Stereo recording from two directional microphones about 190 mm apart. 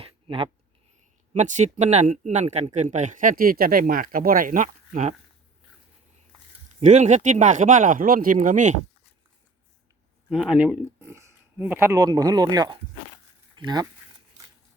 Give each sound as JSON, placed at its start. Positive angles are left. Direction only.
{"t": 0.0, "sound": "a sound", "side_deg": -30}
{"t": 1.3, "sound": "speech", "side_deg": -40}
{"t": 6.7, "sound": "speech", "side_deg": -40}
{"t": 10.2, "sound": "speech", "side_deg": -5}